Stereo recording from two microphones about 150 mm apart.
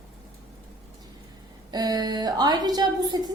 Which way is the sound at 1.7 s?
25° right (ahead or behind).